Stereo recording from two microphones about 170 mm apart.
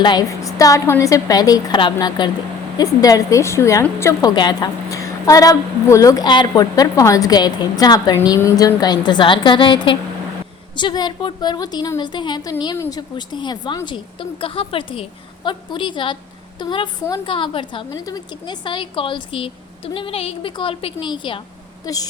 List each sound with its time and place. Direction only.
0.0 s a woman's voice: 25° left (ahead or behind)